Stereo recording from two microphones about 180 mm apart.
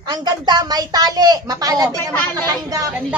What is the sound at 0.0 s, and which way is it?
A woman's voice, 25° right (ahead or behind).